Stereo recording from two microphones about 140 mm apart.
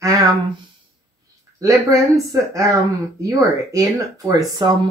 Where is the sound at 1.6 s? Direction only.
25° right (ahead or behind).